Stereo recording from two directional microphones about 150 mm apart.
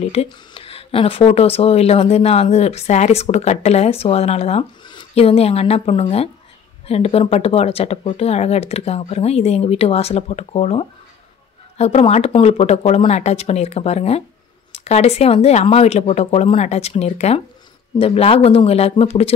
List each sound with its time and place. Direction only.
0.0 s speech: 45° left (ahead or behind)